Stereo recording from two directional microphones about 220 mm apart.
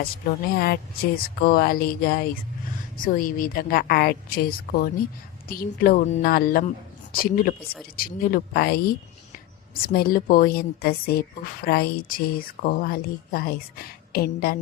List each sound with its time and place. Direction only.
0.5 s a woman's voice: 45° left (ahead or behind)